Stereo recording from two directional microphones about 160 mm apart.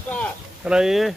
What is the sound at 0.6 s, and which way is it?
Speech, 5° right (ahead or behind).